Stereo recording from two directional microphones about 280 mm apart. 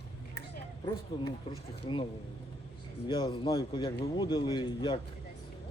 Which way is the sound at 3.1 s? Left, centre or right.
Centre.